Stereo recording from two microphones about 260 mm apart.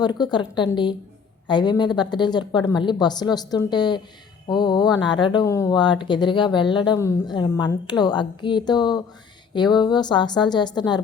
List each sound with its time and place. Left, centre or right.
0.0 s speech: centre